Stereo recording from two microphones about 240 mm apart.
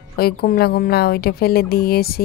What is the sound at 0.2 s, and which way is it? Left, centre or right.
A woman's voice, left.